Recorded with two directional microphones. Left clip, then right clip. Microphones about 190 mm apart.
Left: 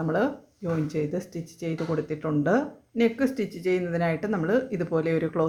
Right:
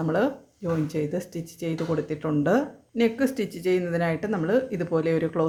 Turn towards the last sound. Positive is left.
turn(degrees=0)  # may be behind; listen again after turning